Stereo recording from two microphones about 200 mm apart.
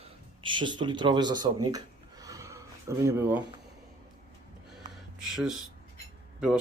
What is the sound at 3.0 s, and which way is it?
Speech, 10° right (ahead or behind).